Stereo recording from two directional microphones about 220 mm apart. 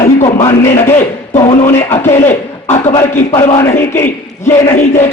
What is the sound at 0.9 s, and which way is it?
Speech, 30° left (ahead or behind).